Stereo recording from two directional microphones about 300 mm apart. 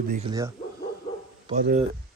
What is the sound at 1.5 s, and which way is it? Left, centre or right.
Speech, right.